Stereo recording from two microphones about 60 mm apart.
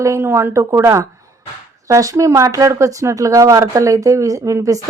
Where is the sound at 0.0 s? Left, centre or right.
Right.